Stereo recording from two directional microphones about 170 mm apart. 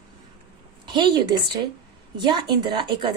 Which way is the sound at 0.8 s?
25° right (ahead or behind).